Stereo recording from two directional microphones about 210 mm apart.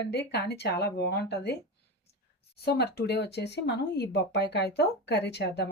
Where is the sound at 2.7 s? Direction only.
50° left (ahead or behind).